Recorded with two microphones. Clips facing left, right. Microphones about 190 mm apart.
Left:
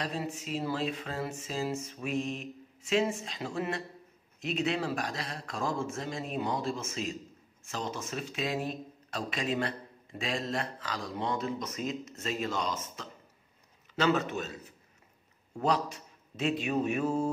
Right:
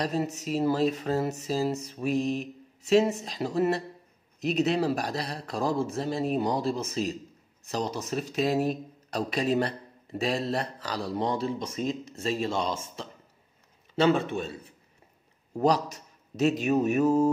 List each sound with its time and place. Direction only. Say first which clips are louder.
0.0 s a man's voice: right 6 dB; 40° right (ahead or behind)